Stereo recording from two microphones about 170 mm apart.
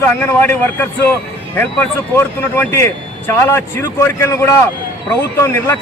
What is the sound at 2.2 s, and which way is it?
A man's voice, 15° left (ahead or behind).